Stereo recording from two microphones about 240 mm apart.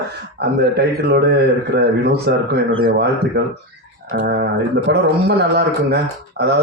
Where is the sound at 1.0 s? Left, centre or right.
Right.